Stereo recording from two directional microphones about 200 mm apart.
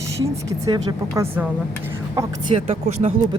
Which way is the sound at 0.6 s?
20° right (ahead or behind).